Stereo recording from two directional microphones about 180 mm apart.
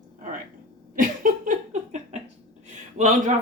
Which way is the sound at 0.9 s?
50° right (ahead or behind).